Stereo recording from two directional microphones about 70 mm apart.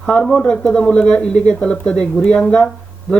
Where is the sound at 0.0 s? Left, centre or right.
Centre.